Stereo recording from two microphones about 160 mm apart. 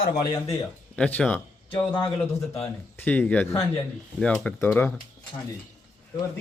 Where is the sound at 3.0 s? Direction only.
10° left (ahead or behind).